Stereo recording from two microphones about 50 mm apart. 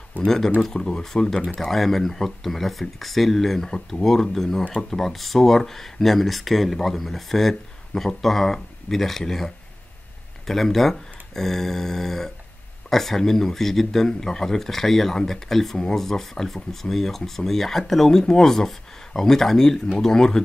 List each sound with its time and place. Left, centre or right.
0.2 s speech: right
0.6 s speech: centre